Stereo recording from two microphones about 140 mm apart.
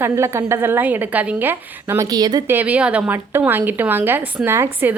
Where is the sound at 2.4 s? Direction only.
15° right (ahead or behind).